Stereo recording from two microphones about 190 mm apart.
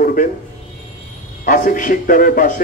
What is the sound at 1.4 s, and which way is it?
A man's voice, 45° left (ahead or behind).